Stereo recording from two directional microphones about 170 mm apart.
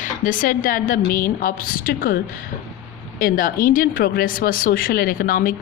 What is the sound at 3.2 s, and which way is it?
Speech, 55° left (ahead or behind).